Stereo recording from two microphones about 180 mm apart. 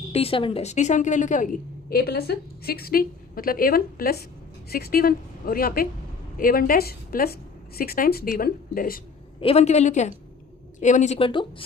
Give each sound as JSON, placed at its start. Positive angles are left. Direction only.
{"t": 0.1, "sound": "a woman's voice", "side_deg": 30}
{"t": 1.9, "sound": "a woman's voice", "side_deg": 60}
{"t": 9.4, "sound": "a woman's voice", "side_deg": 35}